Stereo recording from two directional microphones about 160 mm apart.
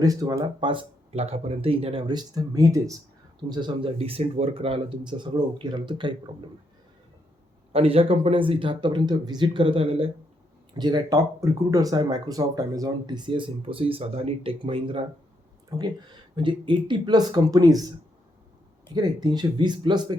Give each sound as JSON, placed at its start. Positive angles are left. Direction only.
{"t": 0.0, "sound": "speech", "side_deg": -20}
{"t": 7.7, "sound": "speech", "side_deg": -35}
{"t": 15.7, "sound": "speech", "side_deg": -20}
{"t": 18.9, "sound": "speech", "side_deg": -25}